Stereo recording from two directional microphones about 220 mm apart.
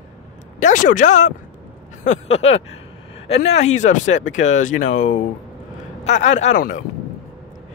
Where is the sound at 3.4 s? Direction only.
50° left (ahead or behind).